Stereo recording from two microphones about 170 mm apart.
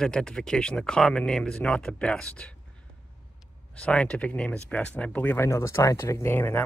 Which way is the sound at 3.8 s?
5° left (ahead or behind).